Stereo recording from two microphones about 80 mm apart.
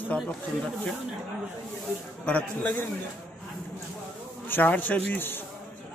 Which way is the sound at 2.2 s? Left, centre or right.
Centre.